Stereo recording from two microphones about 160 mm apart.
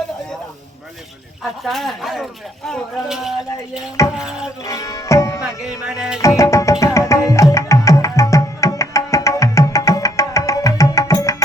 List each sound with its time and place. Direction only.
1.6 s speech: centre (ahead or behind)
4.6 s music: 20° left (ahead or behind)
5.4 s speech: 5° right (ahead or behind)
6.2 s music: 20° left (ahead or behind)